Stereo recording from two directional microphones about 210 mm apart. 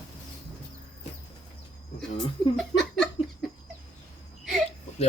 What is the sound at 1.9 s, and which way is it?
Speech, centre (ahead or behind).